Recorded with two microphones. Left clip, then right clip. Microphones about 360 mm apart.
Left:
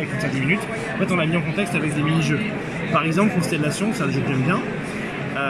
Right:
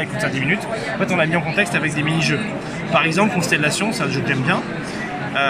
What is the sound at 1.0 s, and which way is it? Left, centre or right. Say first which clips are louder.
Speech: right 4 dB; right.